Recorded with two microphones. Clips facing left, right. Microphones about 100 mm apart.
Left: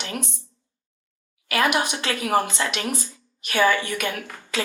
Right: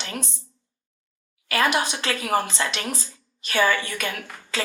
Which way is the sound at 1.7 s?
25° left (ahead or behind).